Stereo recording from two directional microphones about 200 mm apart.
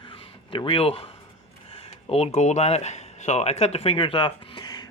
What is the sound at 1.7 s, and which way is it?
Speech, 30° left (ahead or behind).